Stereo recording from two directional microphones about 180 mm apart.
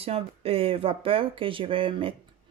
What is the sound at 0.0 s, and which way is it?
Speech, 35° right (ahead or behind).